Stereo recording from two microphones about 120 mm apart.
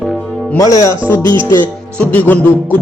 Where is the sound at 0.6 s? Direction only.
30° left (ahead or behind).